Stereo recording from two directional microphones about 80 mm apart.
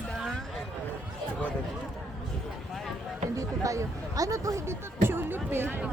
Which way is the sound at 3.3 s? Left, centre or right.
Right.